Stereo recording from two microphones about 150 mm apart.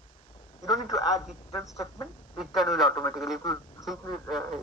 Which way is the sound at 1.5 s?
20° left (ahead or behind).